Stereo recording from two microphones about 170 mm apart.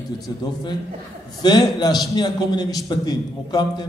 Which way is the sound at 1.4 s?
25° left (ahead or behind).